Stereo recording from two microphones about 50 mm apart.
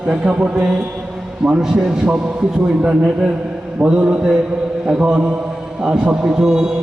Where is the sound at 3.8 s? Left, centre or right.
Right.